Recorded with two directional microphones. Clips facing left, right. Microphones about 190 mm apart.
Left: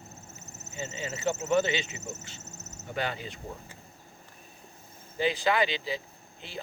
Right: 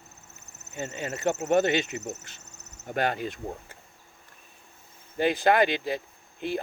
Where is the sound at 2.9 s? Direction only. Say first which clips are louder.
Right 6 dB; 50° right (ahead or behind).